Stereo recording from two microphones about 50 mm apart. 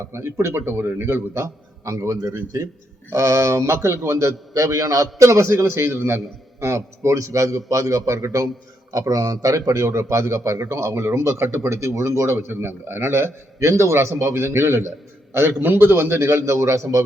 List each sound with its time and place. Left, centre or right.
0.1 s a man's voice: right